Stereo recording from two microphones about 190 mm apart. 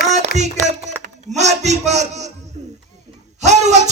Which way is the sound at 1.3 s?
35° right (ahead or behind).